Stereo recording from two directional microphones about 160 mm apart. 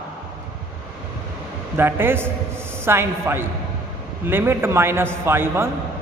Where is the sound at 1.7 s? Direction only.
15° right (ahead or behind).